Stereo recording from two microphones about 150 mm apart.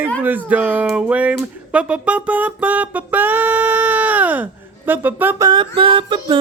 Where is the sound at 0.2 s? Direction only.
10° right (ahead or behind).